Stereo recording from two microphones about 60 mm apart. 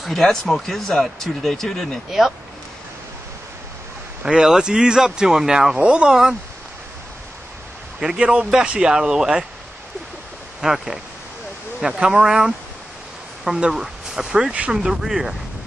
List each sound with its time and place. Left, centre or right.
0.0 s speech: centre
2.0 s speech: centre
4.2 s speech: centre
8.0 s speech: centre
10.6 s speech: centre